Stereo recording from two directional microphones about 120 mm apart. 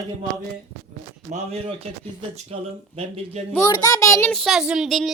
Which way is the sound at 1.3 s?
60° right (ahead or behind).